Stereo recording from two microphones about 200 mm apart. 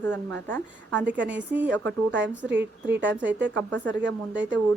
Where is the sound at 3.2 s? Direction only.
65° right (ahead or behind).